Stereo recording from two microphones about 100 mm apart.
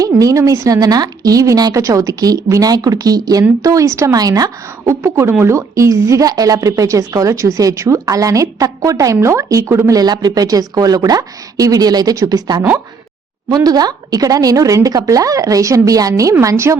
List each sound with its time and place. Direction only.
0.0 s speech: 35° right (ahead or behind)
13.7 s a woman's voice: 40° right (ahead or behind)